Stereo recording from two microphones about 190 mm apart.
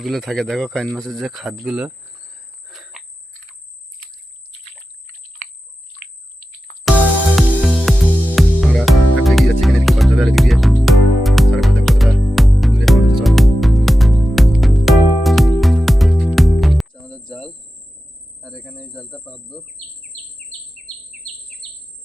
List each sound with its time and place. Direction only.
0.0 s a man's voice: centre (ahead or behind)
1.6 s cricket: 5° right (ahead or behind)
2.6 s a sound: centre (ahead or behind)
4.6 s a sound: 35° left (ahead or behind)
6.4 s music: 45° left (ahead or behind)
6.8 s music: 5° left (ahead or behind)
18.4 s a man's voice: centre (ahead or behind)